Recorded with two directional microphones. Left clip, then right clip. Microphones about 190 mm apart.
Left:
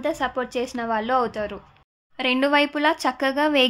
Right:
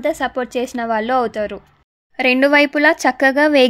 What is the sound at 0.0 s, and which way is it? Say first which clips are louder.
Speech: right 5 dB; 25° right (ahead or behind).